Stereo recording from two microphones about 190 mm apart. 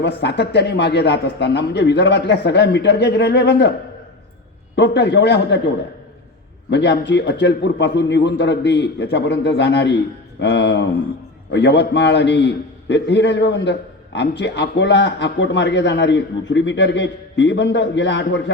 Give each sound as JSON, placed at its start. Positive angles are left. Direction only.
{"t": 0.0, "sound": "a man's voice", "side_deg": 65}
{"t": 4.8, "sound": "a man's voice", "side_deg": 70}
{"t": 6.7, "sound": "a man's voice", "side_deg": 65}